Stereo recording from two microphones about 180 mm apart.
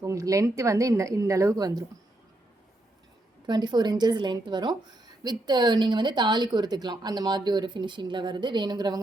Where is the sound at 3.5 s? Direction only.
25° right (ahead or behind).